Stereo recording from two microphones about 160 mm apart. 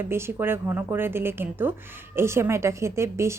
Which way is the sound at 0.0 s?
15° right (ahead or behind).